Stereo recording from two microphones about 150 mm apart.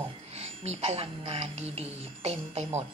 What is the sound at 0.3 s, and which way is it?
Speech, 45° right (ahead or behind).